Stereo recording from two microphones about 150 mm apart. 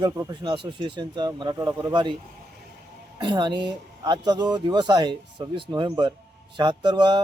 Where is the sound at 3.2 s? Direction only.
30° right (ahead or behind).